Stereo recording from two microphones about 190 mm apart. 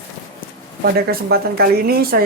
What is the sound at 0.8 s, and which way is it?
Speech, 55° right (ahead or behind).